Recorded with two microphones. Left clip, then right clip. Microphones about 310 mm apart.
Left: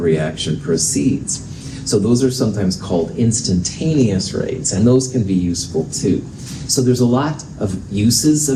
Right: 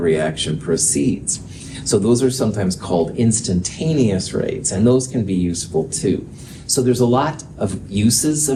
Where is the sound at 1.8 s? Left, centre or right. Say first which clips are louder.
Even; right.